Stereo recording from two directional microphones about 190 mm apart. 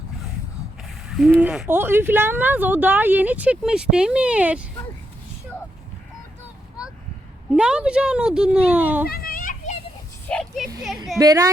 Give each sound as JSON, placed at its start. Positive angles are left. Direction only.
{"t": 1.1, "sound": "speech", "side_deg": 0}
{"t": 7.5, "sound": "speech", "side_deg": -5}
{"t": 9.0, "sound": "children playing", "side_deg": 50}
{"t": 10.2, "sound": "a sound", "side_deg": 5}
{"t": 11.2, "sound": "a woman's voice", "side_deg": -20}